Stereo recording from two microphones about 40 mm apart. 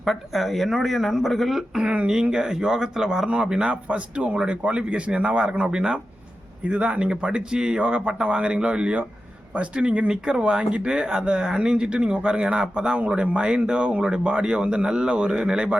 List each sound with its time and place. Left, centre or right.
0.0 s speech: centre
1.8 s speech: right
2.3 s speech: centre; by 5.4 s right
5.4 s speech: right
6.7 s speech: right